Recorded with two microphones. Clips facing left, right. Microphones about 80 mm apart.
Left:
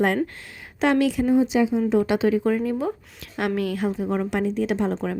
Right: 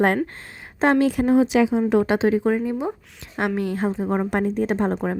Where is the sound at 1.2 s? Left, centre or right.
Right.